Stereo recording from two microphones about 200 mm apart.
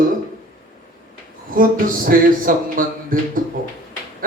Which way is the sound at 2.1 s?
45° right (ahead or behind).